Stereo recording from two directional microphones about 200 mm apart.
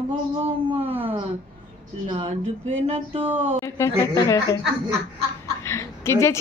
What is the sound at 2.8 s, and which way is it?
Speech, 30° right (ahead or behind).